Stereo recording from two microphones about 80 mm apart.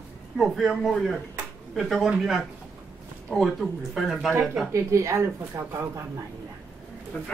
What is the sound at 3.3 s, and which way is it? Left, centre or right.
Speech, centre.